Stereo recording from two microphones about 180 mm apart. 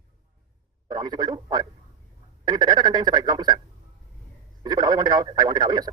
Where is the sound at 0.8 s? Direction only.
25° right (ahead or behind).